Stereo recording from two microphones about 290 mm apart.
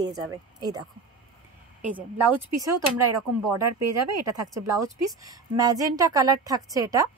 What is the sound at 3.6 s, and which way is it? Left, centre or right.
Speech, right.